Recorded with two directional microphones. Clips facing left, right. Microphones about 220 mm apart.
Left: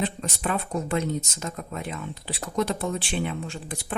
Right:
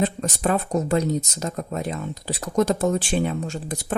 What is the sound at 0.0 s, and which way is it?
Speech, 45° right (ahead or behind).